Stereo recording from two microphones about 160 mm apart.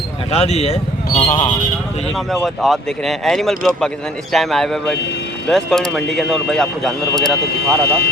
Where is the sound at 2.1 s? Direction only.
Centre (ahead or behind).